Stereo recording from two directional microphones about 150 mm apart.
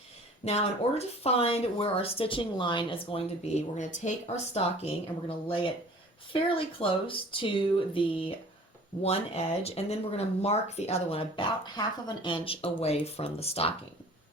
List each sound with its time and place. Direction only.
0.4 s speech: 45° left (ahead or behind)